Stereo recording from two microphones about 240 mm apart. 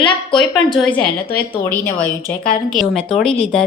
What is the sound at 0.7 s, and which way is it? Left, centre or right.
A woman's voice, centre.